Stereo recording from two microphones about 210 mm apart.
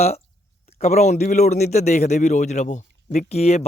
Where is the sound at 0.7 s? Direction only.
30° left (ahead or behind).